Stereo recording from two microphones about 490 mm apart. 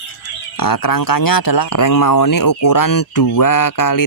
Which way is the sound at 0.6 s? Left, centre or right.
Left.